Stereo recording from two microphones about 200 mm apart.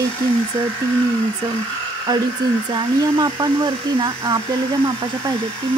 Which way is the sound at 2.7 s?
20° right (ahead or behind).